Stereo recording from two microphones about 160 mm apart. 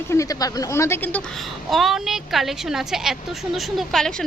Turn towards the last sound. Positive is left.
turn(degrees=0)  # may be behind; listen again after turning